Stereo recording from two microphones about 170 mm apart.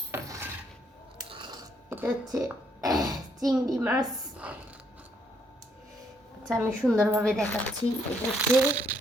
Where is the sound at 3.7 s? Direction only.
20° right (ahead or behind).